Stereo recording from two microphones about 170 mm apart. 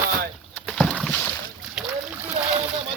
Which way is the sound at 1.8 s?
10° right (ahead or behind).